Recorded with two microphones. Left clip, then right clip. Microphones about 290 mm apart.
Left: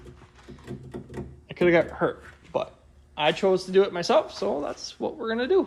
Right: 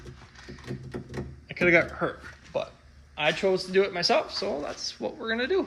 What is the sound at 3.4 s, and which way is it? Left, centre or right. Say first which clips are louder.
Speech: left 4 dB; left.